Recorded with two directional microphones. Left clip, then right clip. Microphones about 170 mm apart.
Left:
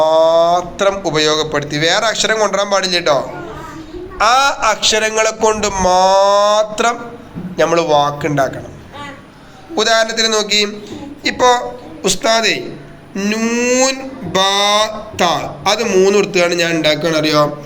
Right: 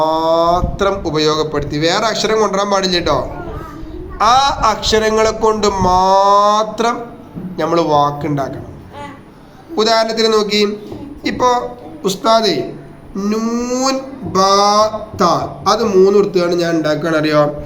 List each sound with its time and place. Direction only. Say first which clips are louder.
0.0 s a man's voice: left 3 dB; 10° left (ahead or behind)
9.7 s a man's voice: even; 10° left (ahead or behind)
13.4 s a man's voice: left 3 dB; 20° left (ahead or behind)
13.7 s mantra: left 4 dB; 40° left (ahead or behind)
15.8 s a man's voice: right 1 dB; 15° left (ahead or behind)